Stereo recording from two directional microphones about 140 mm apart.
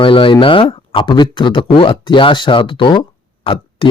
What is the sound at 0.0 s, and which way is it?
Speech, 40° left (ahead or behind).